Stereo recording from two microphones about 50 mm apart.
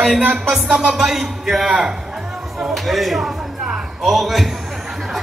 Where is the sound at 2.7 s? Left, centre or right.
Centre.